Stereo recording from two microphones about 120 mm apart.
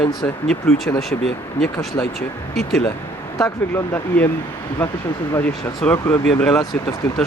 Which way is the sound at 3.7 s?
15° left (ahead or behind).